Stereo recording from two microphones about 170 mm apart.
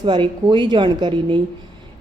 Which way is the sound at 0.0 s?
30° right (ahead or behind).